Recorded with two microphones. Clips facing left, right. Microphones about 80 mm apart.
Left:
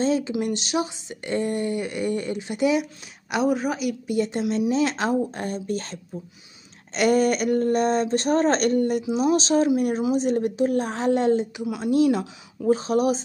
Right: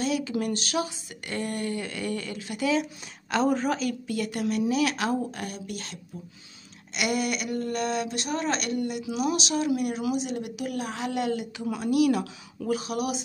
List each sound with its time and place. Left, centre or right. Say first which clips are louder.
0.0 s a sound: left 5 dB; left
0.3 s speech: left 3 dB; left
2.8 s a woman's voice: left 1 dB; centre
4.2 s speech: left 4 dB; left
9.0 s speech: left 6 dB; left